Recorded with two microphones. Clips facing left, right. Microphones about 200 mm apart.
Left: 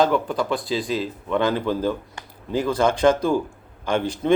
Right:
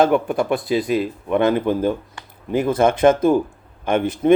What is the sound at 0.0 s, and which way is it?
Speech, 25° right (ahead or behind).